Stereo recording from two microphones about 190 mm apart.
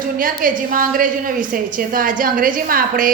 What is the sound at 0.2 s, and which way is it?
A woman's voice, 45° right (ahead or behind).